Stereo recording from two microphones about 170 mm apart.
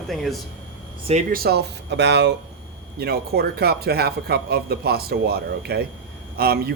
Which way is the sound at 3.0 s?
65° right (ahead or behind).